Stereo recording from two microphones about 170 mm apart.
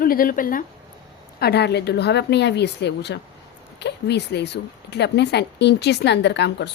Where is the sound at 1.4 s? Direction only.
75° left (ahead or behind).